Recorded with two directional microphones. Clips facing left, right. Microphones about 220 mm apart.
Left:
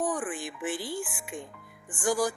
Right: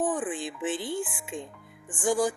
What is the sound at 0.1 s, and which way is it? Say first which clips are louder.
Speech: right 2 dB; 20° right (ahead or behind).